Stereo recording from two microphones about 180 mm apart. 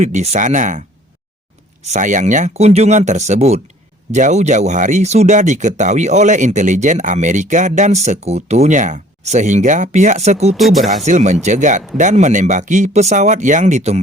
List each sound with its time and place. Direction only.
0.0 s speech: 40° right (ahead or behind)
1.9 s speech: 45° right (ahead or behind)
10.6 s speech: centre (ahead or behind)
10.8 s speech: 40° right (ahead or behind)